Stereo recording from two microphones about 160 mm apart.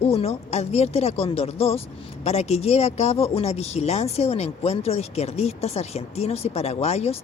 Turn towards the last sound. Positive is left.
turn(degrees=40)  # may be behind; listen again after turning